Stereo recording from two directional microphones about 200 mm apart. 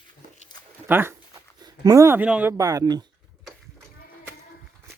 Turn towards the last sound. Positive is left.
turn(degrees=-20)  # may be behind; listen again after turning